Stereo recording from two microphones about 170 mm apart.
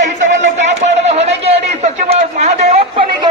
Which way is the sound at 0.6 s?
40° right (ahead or behind).